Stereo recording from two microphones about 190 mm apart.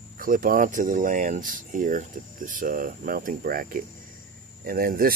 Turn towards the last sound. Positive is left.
turn(degrees=-50)  # may be behind; listen again after turning